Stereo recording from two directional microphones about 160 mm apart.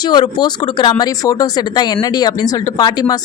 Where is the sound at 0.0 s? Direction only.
25° left (ahead or behind).